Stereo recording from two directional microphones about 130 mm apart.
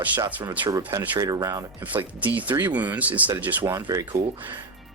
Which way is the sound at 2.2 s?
15° right (ahead or behind).